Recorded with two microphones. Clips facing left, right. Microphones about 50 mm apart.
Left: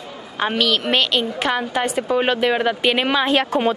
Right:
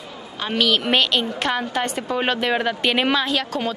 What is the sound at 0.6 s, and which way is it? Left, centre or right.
A woman's voice, centre.